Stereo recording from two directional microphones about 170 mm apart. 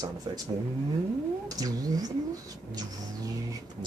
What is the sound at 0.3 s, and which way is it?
Speech, 25° right (ahead or behind).